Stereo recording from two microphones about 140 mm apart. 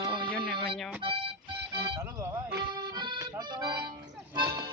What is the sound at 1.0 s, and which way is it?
Speech, 35° right (ahead or behind).